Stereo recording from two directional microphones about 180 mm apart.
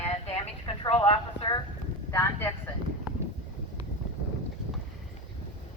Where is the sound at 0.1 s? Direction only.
35° left (ahead or behind).